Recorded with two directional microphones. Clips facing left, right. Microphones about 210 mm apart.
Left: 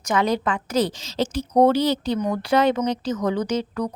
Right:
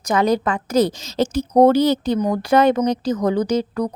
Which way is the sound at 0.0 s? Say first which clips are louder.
Right 4 dB; 40° right (ahead or behind).